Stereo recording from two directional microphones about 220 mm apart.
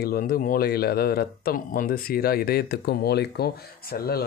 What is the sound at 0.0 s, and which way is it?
Speech, 45° left (ahead or behind).